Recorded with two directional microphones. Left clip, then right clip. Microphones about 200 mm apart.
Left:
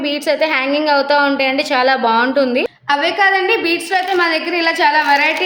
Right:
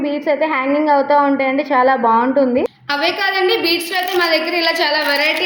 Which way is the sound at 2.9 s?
50° left (ahead or behind).